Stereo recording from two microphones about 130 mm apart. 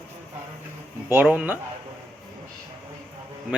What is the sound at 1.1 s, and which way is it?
Speech, 10° right (ahead or behind).